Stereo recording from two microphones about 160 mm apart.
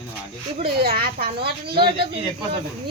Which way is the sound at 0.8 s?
75° right (ahead or behind).